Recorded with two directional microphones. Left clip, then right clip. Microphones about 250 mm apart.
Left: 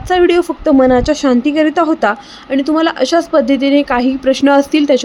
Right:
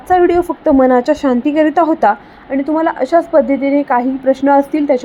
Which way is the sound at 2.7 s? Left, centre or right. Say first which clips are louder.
Even; centre.